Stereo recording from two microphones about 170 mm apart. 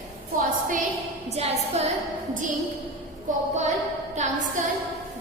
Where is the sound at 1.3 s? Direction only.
40° right (ahead or behind).